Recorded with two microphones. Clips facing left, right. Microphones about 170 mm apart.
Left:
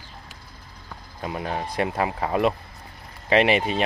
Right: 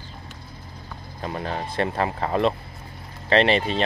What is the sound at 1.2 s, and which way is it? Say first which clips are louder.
Speech: even; 10° left (ahead or behind).